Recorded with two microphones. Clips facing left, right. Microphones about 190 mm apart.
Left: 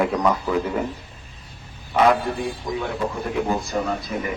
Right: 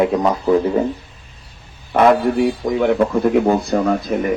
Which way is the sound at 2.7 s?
65° right (ahead or behind).